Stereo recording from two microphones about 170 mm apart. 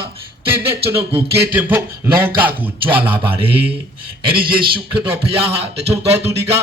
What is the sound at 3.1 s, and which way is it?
Speech, 30° right (ahead or behind).